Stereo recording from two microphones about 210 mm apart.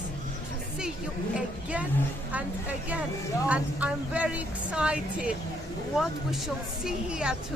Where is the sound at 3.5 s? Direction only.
5° right (ahead or behind).